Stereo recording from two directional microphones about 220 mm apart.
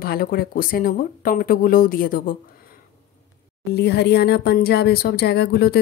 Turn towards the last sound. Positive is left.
turn(degrees=45)  # may be behind; listen again after turning